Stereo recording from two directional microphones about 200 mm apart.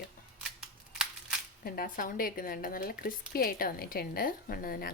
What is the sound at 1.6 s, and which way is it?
Speech, 45° left (ahead or behind).